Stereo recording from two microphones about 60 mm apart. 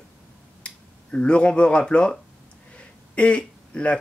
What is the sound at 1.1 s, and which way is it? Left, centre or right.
Speech, centre.